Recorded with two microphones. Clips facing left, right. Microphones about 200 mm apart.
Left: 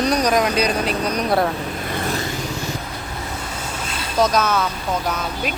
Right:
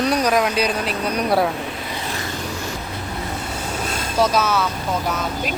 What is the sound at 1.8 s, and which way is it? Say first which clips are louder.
Vehicle: left 4 dB; 55° left (ahead or behind).